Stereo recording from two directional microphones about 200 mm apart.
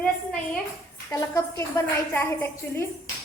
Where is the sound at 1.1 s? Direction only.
15° left (ahead or behind).